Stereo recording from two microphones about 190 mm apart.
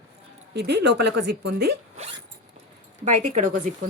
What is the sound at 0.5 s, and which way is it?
A woman's voice, 65° right (ahead or behind).